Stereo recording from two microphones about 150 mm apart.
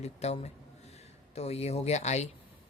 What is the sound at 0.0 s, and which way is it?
A man's voice, 45° left (ahead or behind).